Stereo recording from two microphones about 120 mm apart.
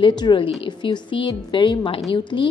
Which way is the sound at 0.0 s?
40° left (ahead or behind).